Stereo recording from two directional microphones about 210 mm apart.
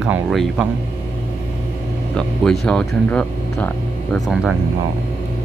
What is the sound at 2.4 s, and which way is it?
Speech, 5° left (ahead or behind).